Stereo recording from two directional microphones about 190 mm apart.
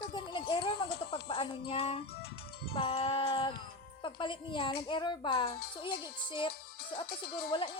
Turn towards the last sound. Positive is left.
turn(degrees=25)  # may be behind; listen again after turning